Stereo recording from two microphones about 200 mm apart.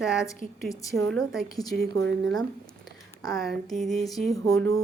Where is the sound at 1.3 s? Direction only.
Centre (ahead or behind).